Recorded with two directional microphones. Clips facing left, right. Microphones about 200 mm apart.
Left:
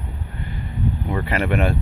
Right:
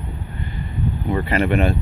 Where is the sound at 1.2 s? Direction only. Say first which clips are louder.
Right 2 dB; 5° left (ahead or behind).